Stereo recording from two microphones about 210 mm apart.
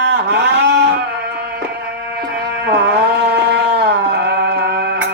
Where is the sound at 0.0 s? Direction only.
55° right (ahead or behind).